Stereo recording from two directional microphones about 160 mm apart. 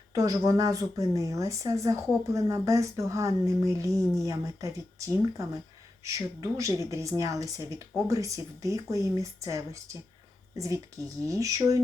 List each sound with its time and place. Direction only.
0.1 s speech: 20° right (ahead or behind)
11.3 s speech: 20° right (ahead or behind)